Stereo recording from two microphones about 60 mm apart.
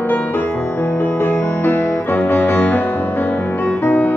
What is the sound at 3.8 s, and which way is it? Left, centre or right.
Music, left.